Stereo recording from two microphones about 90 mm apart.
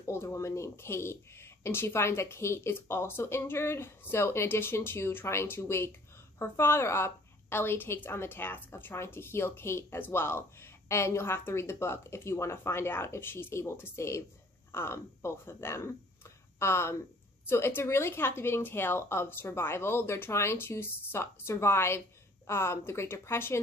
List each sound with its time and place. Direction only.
0.0 s speech: 35° left (ahead or behind)